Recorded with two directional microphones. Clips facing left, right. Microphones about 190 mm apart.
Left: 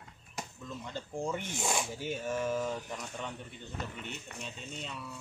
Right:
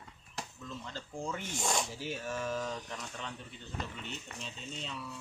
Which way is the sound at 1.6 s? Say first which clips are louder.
Even; 5° left (ahead or behind).